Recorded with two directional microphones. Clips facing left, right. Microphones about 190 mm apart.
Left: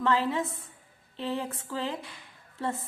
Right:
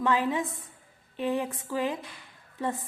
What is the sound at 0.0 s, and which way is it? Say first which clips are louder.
A woman's voice: even; 15° right (ahead or behind).